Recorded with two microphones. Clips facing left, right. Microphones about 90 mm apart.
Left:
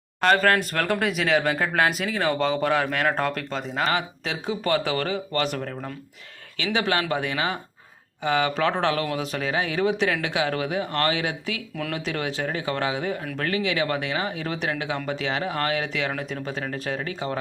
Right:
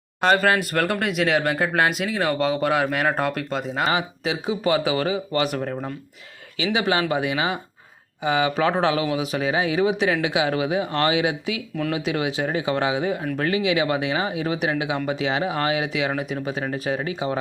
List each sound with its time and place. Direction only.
0.3 s speech: 5° right (ahead or behind)
5.5 s speech: 25° right (ahead or behind)
6.7 s speech: 5° right (ahead or behind)